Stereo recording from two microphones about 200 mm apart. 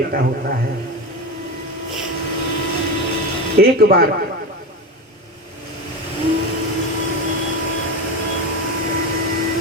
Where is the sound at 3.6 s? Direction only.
50° right (ahead or behind).